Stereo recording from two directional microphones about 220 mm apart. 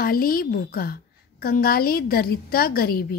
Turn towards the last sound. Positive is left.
turn(degrees=45)  # may be behind; listen again after turning